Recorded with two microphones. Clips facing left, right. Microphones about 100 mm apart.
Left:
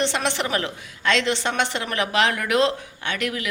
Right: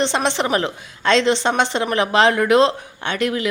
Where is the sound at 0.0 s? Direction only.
25° right (ahead or behind).